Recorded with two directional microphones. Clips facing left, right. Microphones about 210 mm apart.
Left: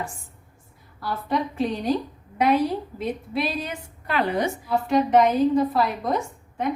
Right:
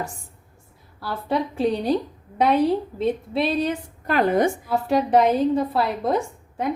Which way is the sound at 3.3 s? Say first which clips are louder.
Right 4 dB; 30° right (ahead or behind).